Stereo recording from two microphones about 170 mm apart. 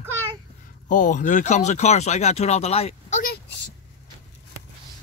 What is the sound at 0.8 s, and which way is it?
Speech, 50° left (ahead or behind).